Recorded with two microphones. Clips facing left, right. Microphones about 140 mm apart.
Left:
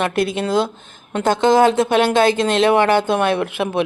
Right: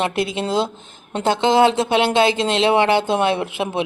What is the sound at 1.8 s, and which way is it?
Speech, 20° right (ahead or behind).